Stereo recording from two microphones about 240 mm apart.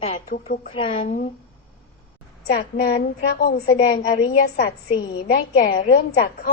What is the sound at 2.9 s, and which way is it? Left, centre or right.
A woman's voice, left.